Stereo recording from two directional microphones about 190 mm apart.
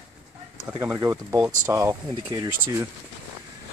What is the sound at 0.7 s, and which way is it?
Speech, 15° right (ahead or behind).